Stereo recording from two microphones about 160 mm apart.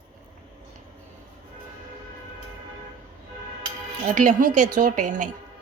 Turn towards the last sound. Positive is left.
turn(degrees=-55)  # may be behind; listen again after turning